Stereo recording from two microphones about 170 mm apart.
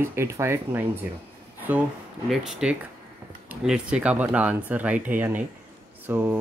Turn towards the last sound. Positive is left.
turn(degrees=-15)  # may be behind; listen again after turning